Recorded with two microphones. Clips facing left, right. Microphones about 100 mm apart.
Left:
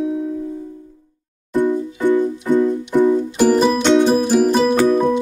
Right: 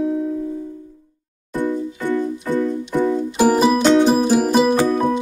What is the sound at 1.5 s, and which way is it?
Music, 20° left (ahead or behind).